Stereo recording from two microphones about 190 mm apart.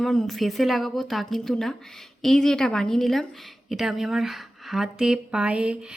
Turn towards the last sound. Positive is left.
turn(degrees=-5)  # may be behind; listen again after turning